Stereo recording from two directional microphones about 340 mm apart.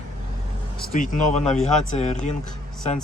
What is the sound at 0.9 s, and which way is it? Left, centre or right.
Speech, left.